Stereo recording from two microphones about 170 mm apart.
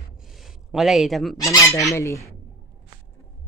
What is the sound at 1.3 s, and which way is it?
Fowl, 20° left (ahead or behind).